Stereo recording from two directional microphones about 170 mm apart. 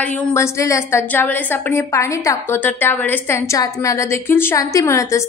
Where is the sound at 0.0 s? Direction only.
10° left (ahead or behind).